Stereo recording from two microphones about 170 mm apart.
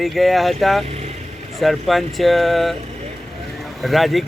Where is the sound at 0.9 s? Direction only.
40° right (ahead or behind).